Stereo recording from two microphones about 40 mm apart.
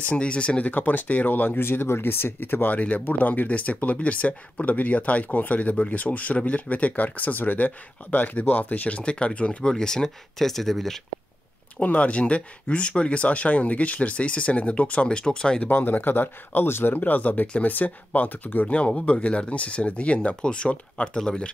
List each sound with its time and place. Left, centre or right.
0.1 s speech: left
0.7 s speech: left
1.6 s speech: left
2.7 s speech: left
5.8 s speech: left
9.0 s speech: left
9.6 s speech: centre
11.8 s speech: left
15.7 s speech: left
16.9 s speech: left
18.7 s speech: left